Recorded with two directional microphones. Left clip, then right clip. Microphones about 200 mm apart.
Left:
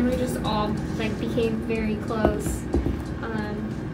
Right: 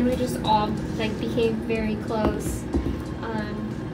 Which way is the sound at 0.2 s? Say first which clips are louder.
Right 4 dB; 15° left (ahead or behind).